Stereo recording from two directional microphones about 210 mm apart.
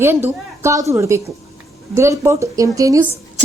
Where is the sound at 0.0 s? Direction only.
10° right (ahead or behind).